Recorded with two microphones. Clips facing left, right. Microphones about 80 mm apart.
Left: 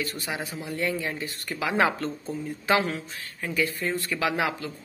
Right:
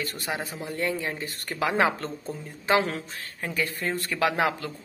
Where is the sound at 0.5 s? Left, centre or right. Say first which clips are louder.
Even; right.